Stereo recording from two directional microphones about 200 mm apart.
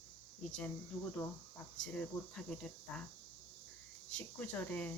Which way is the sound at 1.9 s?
5° left (ahead or behind).